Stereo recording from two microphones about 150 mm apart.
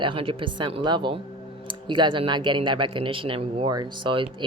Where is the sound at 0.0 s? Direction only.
35° right (ahead or behind).